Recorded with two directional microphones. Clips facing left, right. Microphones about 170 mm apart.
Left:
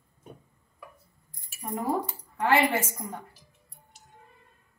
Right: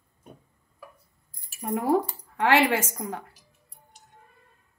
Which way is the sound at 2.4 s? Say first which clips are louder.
Right 2 dB; 90° right.